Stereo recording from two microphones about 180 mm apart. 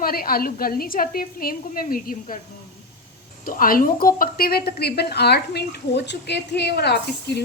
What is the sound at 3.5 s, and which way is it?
A woman's voice, 50° left (ahead or behind).